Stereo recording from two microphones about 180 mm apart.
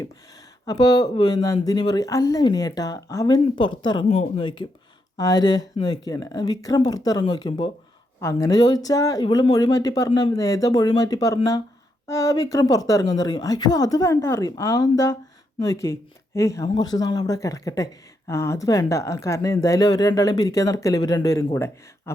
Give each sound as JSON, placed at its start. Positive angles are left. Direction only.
{"t": 0.6, "sound": "speech", "side_deg": 20}